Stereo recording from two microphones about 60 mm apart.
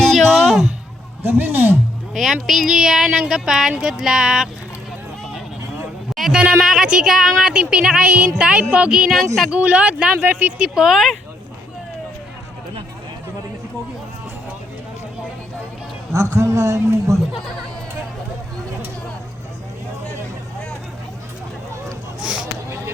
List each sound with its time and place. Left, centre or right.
0.0 s a sound: centre
1.2 s a man's voice: right
2.1 s speech: centre
6.3 s speech: centre
9.5 s speech: right
10.2 s speech: right
10.6 s speech: centre
16.4 s speech: right
22.2 s a sound: centre